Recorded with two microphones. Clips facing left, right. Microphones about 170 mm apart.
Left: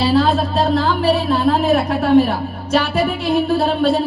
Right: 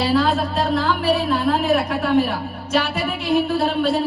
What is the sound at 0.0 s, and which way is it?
A woman's voice, 30° left (ahead or behind).